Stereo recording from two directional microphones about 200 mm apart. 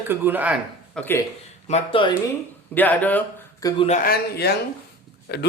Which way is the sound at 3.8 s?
40° left (ahead or behind).